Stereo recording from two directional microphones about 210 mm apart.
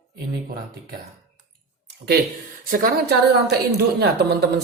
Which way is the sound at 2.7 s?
45° right (ahead or behind).